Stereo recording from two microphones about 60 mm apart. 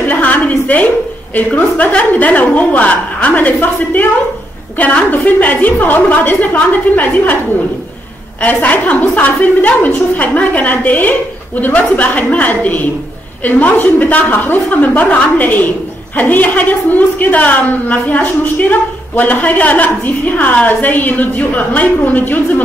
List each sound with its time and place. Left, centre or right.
0.0 s a woman's voice: left
8.6 s a woman's voice: left